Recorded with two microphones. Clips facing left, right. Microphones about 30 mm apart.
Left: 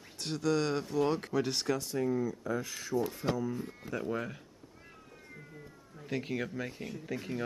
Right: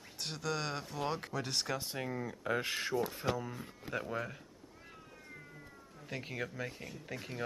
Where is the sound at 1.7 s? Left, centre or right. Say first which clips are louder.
Left 7 dB; right.